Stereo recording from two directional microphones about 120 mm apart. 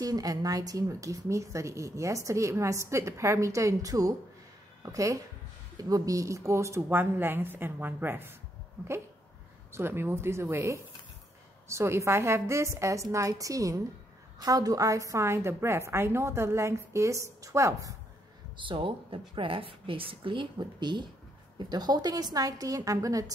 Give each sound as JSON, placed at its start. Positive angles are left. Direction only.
{"t": 0.0, "sound": "a woman's voice", "side_deg": -30}
{"t": 9.7, "sound": "a woman's voice", "side_deg": -20}
{"t": 18.6, "sound": "a woman's voice", "side_deg": -45}